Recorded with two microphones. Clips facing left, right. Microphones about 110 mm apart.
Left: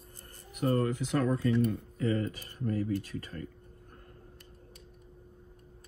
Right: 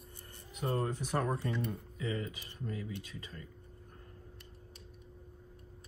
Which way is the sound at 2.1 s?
45° left (ahead or behind).